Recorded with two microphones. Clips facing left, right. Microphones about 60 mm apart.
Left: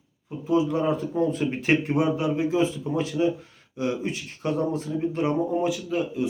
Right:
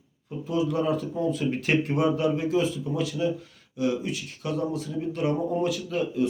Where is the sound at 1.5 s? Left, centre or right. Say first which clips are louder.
Left 2 dB; left.